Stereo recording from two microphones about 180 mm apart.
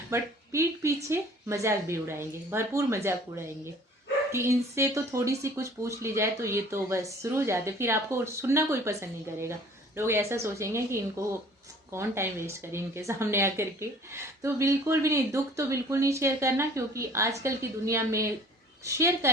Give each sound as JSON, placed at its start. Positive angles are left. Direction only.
{"t": 0.1, "sound": "a woman's voice", "side_deg": -15}